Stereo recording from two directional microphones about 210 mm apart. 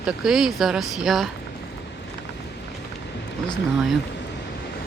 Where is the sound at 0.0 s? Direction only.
Centre (ahead or behind).